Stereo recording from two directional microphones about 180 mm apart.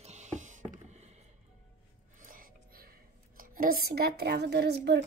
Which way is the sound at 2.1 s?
50° right (ahead or behind).